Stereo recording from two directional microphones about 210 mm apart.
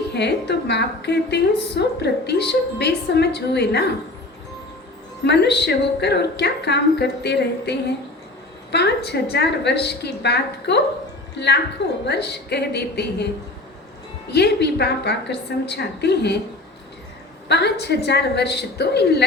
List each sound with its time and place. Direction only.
0.1 s a woman's voice: 50° left (ahead or behind)
5.2 s a woman's voice: 50° left (ahead or behind)
14.3 s a woman's voice: 50° left (ahead or behind)
17.5 s a woman's voice: 50° left (ahead or behind)